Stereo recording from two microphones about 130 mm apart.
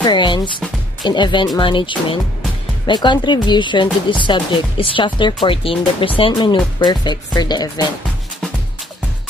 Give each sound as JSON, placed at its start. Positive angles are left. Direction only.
{"t": 0.0, "sound": "speech", "side_deg": 35}